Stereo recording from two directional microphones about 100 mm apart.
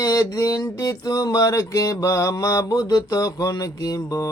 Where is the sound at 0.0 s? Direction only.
40° left (ahead or behind).